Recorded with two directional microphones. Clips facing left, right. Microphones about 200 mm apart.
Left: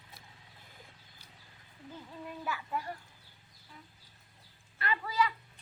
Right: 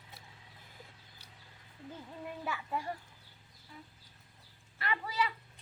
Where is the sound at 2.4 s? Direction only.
25° right (ahead or behind).